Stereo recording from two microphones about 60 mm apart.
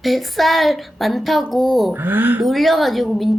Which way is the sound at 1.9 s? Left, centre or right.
Right.